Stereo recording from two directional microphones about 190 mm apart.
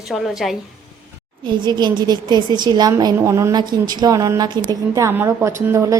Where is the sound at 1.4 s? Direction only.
25° right (ahead or behind).